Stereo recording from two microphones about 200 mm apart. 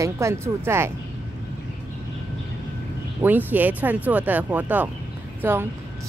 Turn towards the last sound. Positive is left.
turn(degrees=-10)  # may be behind; listen again after turning